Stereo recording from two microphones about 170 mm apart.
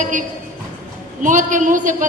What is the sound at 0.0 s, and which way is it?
A woman's voice, 50° right (ahead or behind).